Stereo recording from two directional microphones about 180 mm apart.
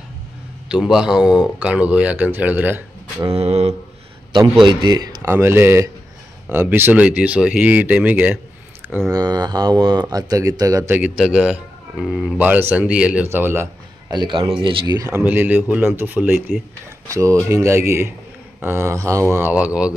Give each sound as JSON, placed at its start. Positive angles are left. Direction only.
{"t": 0.7, "sound": "a man's voice", "side_deg": -5}
{"t": 3.3, "sound": "a sound", "side_deg": -35}
{"t": 4.6, "sound": "speech", "side_deg": -20}
{"t": 9.1, "sound": "speech", "side_deg": -20}
{"t": 11.1, "sound": "a man's voice", "side_deg": -5}
{"t": 14.1, "sound": "speech", "side_deg": -25}